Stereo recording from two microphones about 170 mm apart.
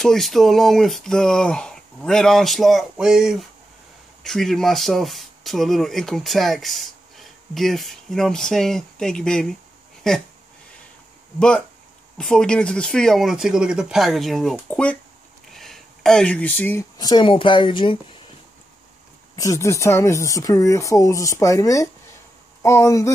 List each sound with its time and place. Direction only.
0.0 s speech: centre (ahead or behind)
11.3 s speech: 5° left (ahead or behind)
15.5 s a sound: centre (ahead or behind)
17.0 s speech: 25° left (ahead or behind)
19.3 s speech: 20° left (ahead or behind)